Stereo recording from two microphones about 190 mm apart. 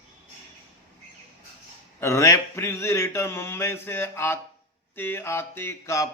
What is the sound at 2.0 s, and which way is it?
Speech, 15° left (ahead or behind).